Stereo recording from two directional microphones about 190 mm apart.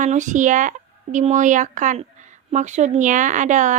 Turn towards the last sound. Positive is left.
turn(degrees=-40)  # may be behind; listen again after turning